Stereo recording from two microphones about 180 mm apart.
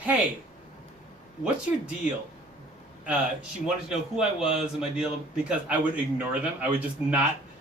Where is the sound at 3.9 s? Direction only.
5° right (ahead or behind).